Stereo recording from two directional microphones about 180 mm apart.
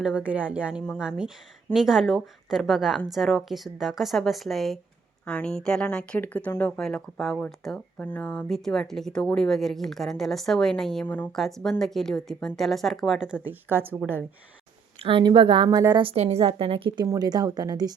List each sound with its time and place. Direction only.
0.0 s a woman's voice: 5° right (ahead or behind)
15.0 s a woman's voice: 25° right (ahead or behind)